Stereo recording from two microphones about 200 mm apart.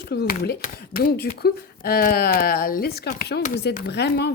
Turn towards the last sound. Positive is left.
turn(degrees=55)  # may be behind; listen again after turning